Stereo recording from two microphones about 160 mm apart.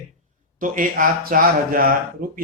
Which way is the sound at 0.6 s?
55° right (ahead or behind).